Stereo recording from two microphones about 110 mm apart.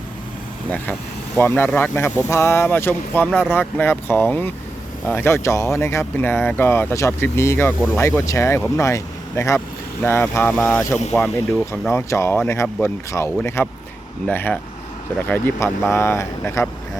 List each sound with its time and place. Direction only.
1.4 s speech: 20° left (ahead or behind)